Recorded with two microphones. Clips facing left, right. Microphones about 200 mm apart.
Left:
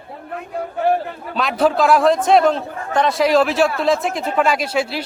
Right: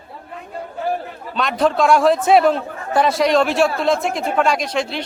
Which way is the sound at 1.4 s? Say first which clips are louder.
Left 1 dB; 5° left (ahead or behind).